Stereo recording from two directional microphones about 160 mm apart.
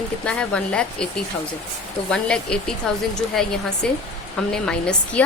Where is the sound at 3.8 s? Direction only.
5° left (ahead or behind).